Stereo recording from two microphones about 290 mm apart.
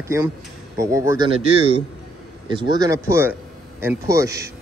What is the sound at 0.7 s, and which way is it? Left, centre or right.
Speech, centre.